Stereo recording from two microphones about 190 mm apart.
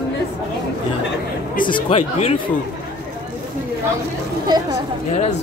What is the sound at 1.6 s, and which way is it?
Speech, 25° left (ahead or behind).